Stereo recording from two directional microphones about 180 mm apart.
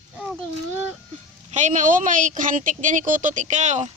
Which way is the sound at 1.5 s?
40° right (ahead or behind).